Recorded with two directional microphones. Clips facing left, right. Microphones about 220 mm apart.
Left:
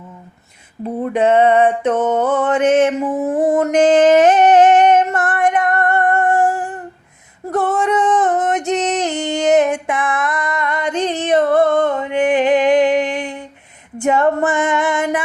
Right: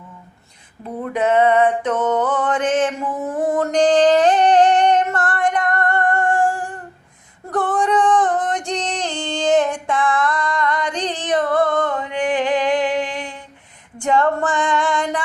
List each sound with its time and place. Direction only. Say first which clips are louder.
1.0 s a sound: left 3 dB; 30° left (ahead or behind)
2.1 s mantra: left 4 dB; 25° left (ahead or behind)
7.5 s female singing: left 2 dB; 25° left (ahead or behind)